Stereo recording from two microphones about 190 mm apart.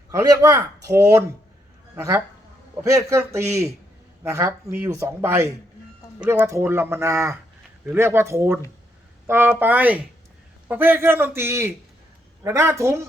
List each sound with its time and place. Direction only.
0.1 s a man's voice: 15° right (ahead or behind)